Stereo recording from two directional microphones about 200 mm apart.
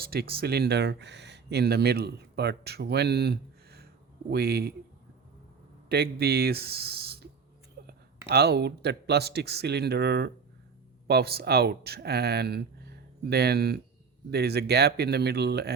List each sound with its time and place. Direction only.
0.0 s speech: 50° right (ahead or behind)
5.9 s speech: 55° right (ahead or behind)
7.8 s a sound: 50° right (ahead or behind)
8.3 s speech: 55° right (ahead or behind)